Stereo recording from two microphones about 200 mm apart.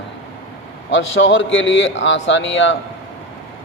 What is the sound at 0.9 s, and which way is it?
A man's voice, 70° left (ahead or behind).